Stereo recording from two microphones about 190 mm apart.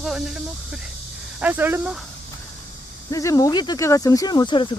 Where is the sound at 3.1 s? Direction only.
15° left (ahead or behind).